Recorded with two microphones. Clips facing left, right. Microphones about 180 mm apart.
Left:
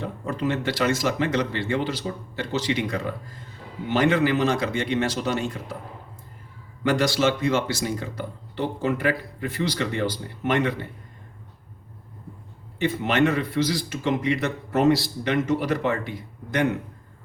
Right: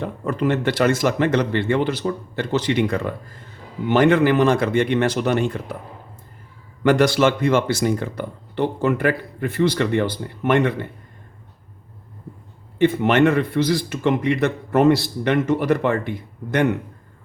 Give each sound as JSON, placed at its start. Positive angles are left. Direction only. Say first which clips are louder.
{"t": 0.0, "sound": "speech", "louder": "right 5 dB", "side_deg": -55}
{"t": 6.8, "sound": "speech", "louder": "right 5 dB", "side_deg": -55}
{"t": 12.8, "sound": "speech", "louder": "right 6 dB", "side_deg": -55}